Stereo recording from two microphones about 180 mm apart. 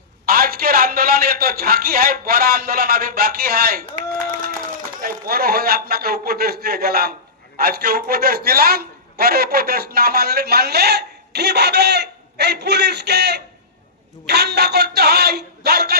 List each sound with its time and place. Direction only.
0.3 s a man's voice: 55° right (ahead or behind)